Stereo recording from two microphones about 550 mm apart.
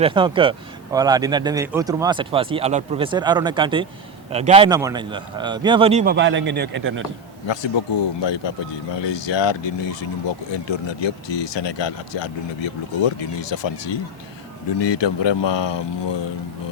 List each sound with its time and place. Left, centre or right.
0.0 s speech: centre
7.4 s speech: left